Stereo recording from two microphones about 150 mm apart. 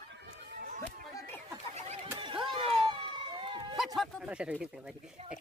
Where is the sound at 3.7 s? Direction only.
Centre (ahead or behind).